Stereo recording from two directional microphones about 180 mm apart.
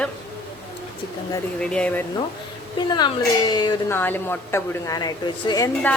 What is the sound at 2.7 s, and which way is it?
Speech, 25° left (ahead or behind).